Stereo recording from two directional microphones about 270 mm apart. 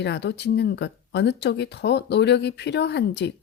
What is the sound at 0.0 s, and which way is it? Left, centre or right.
A woman's voice, left.